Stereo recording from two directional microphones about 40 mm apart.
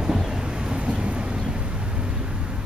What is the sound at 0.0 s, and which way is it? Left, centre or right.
Vehicle, centre.